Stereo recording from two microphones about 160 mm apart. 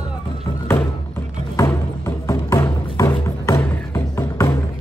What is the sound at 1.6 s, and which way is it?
Music, 15° left (ahead or behind).